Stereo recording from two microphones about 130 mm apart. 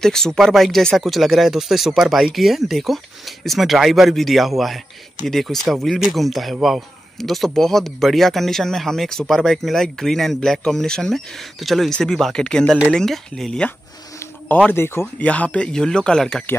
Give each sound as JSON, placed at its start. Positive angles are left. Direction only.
{"t": 0.0, "sound": "a man's voice", "side_deg": 5}
{"t": 14.7, "sound": "speech", "side_deg": 20}